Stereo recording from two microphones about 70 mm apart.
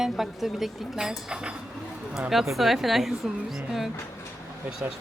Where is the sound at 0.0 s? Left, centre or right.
Centre.